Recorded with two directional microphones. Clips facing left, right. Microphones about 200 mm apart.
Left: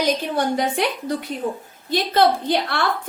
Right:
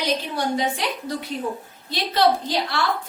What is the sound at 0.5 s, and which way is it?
A woman's voice, 55° left (ahead or behind).